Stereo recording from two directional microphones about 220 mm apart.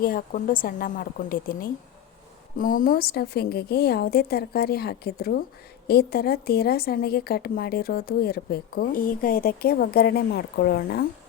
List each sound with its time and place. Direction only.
0.0 s a woman's voice: 40° left (ahead or behind)